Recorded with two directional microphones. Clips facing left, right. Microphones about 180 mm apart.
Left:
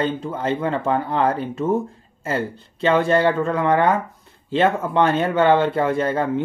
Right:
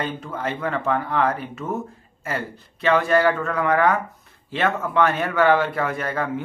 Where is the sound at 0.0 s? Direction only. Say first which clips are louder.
Left 5 dB; 25° left (ahead or behind).